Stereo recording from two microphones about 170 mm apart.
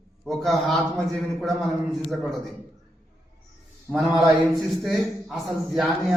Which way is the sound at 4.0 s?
Centre (ahead or behind).